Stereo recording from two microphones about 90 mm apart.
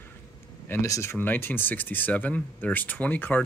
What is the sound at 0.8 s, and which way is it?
Speech, 35° left (ahead or behind).